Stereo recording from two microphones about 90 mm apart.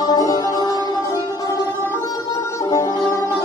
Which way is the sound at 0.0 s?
45° left (ahead or behind).